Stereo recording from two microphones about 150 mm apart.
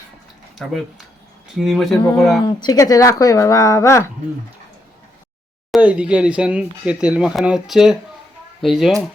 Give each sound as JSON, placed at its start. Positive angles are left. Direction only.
{"t": 0.7, "sound": "speech", "side_deg": 0}
{"t": 2.4, "sound": "speech", "side_deg": 30}
{"t": 5.7, "sound": "speech", "side_deg": -10}